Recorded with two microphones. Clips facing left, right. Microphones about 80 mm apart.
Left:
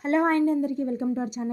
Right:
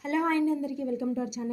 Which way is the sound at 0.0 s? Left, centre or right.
Left.